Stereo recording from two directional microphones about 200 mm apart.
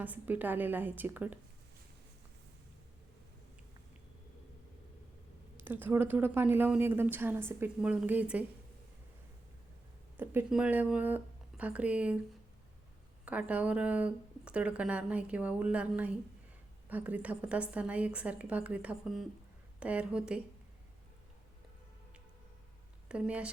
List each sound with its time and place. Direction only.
0.0 s speech: 10° right (ahead or behind)
5.5 s speech: 10° right (ahead or behind)
10.2 s speech: 10° right (ahead or behind)
13.2 s speech: 5° right (ahead or behind)
23.0 s speech: 5° right (ahead or behind)